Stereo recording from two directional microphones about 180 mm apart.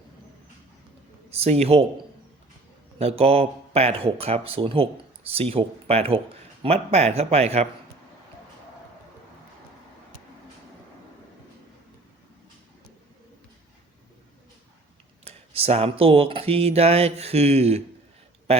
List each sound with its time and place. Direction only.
1.3 s speech: 35° right (ahead or behind)
3.0 s speech: 35° right (ahead or behind)
15.2 s speech: 35° right (ahead or behind)